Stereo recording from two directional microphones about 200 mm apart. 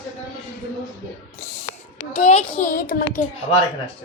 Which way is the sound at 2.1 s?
30° left (ahead or behind).